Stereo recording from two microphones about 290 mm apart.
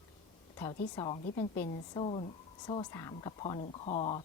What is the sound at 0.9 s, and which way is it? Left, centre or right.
A woman's voice, centre.